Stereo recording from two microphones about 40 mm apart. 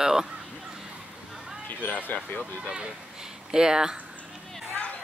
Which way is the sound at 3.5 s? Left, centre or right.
Centre.